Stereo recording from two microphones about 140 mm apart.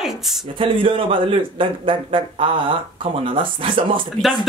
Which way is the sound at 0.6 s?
40° right (ahead or behind).